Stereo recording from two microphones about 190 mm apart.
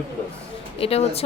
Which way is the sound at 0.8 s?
30° left (ahead or behind).